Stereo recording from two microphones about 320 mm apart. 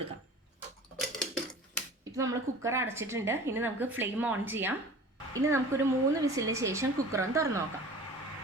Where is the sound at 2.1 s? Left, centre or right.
Centre.